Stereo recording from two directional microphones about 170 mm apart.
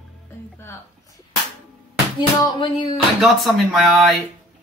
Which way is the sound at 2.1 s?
25° left (ahead or behind).